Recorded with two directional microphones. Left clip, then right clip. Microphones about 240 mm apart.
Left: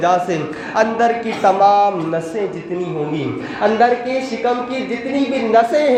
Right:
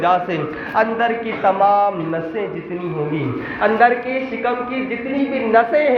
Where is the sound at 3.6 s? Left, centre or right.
Left.